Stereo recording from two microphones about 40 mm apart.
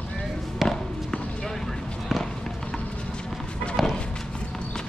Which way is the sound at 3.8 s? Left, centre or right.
Centre.